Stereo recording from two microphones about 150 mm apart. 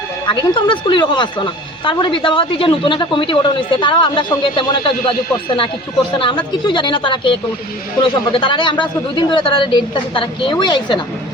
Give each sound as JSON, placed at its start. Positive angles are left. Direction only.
{"t": 0.3, "sound": "a woman's voice", "side_deg": 35}
{"t": 6.1, "sound": "a woman's voice", "side_deg": 35}